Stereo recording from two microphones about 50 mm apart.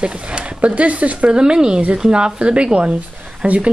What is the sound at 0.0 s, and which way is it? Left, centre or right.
Speech, right.